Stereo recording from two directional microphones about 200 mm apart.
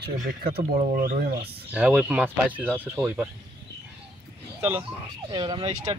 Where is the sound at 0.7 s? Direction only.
40° right (ahead or behind).